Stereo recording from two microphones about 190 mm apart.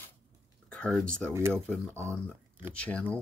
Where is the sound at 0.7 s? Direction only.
5° left (ahead or behind).